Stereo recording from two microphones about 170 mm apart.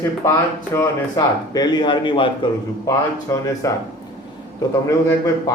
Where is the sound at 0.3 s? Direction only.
15° left (ahead or behind).